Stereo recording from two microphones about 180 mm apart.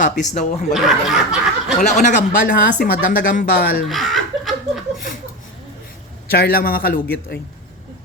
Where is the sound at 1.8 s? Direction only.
40° left (ahead or behind).